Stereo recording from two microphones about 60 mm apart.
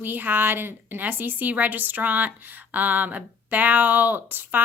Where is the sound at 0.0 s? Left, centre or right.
Right.